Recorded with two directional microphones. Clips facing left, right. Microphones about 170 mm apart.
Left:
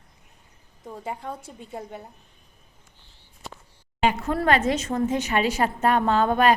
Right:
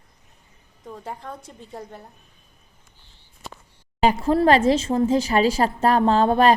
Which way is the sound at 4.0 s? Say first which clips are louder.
Right 5 dB; 35° right (ahead or behind).